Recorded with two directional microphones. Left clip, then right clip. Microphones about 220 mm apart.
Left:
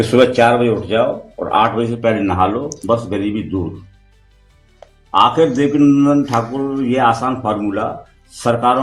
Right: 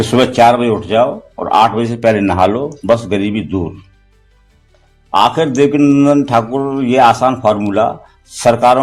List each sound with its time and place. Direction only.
0.1 s mantra: 50° right (ahead or behind)
5.1 s mantra: 50° right (ahead or behind)